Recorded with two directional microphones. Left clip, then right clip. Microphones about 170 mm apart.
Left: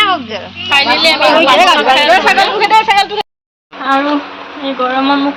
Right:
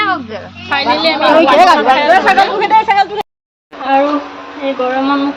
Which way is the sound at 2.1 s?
25° right (ahead or behind).